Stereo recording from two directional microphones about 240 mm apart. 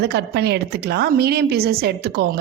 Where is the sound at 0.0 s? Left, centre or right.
Right.